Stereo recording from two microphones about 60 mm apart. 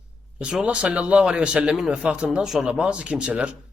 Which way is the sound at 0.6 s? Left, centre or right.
Right.